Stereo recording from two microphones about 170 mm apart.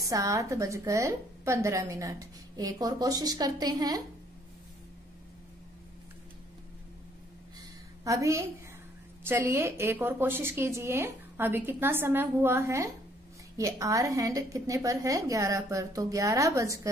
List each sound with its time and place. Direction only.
0.0 s a woman's voice: 20° right (ahead or behind)
8.0 s a woman's voice: 20° right (ahead or behind)